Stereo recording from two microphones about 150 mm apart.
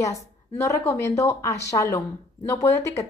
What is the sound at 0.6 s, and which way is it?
Speech, 15° left (ahead or behind).